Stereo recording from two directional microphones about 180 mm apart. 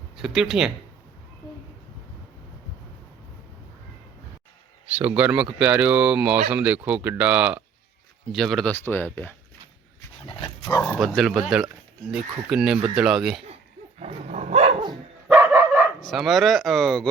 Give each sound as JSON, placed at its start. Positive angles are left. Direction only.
{"t": 0.2, "sound": "speech", "side_deg": -5}
{"t": 4.9, "sound": "speech", "side_deg": -10}
{"t": 10.2, "sound": "dog", "side_deg": 25}
{"t": 11.0, "sound": "speech", "side_deg": 0}
{"t": 14.0, "sound": "dog", "side_deg": -35}
{"t": 14.8, "sound": "dog", "side_deg": -25}
{"t": 16.0, "sound": "speech", "side_deg": 0}